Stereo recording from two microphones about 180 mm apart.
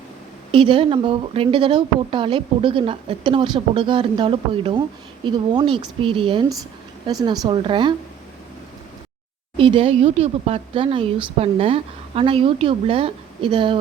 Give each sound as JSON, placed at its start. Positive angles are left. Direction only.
{"t": 0.5, "sound": "speech", "side_deg": -30}
{"t": 9.6, "sound": "a woman's voice", "side_deg": -30}